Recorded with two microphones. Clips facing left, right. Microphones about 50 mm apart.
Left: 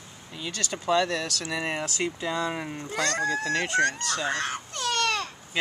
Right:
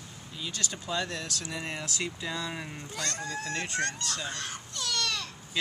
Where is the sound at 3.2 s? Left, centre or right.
Left.